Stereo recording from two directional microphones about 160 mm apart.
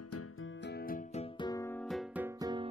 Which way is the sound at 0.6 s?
80° left.